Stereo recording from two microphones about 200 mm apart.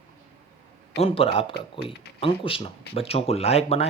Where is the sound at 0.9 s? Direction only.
30° left (ahead or behind).